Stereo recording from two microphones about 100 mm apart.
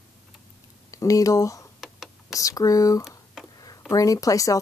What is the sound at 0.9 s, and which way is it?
Speech, 35° left (ahead or behind).